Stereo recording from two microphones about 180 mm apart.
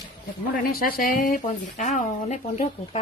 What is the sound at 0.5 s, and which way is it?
Speech, 55° left (ahead or behind).